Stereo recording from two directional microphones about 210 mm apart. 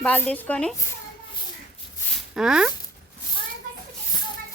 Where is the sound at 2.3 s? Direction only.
5° right (ahead or behind).